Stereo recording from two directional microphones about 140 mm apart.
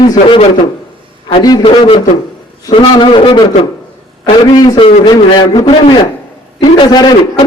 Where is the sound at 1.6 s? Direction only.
40° left (ahead or behind).